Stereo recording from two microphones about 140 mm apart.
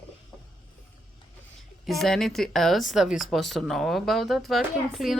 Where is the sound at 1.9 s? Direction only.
Centre (ahead or behind).